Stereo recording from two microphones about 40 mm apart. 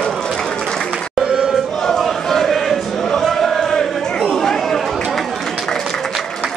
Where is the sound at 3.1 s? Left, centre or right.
Centre.